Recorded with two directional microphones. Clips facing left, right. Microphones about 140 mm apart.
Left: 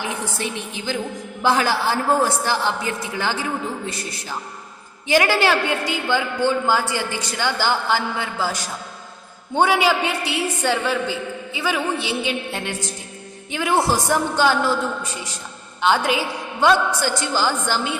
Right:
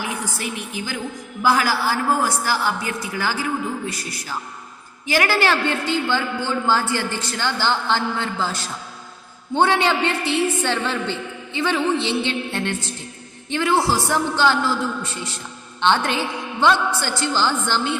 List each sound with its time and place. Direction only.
0.0 s a woman's voice: 25° left (ahead or behind)